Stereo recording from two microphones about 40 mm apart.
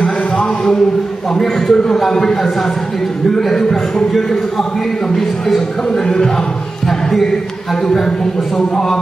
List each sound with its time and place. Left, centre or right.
0.0 s a sound: left
1.4 s a man's voice: centre
6.0 s a man's voice: centre
6.9 s basketball bounce: centre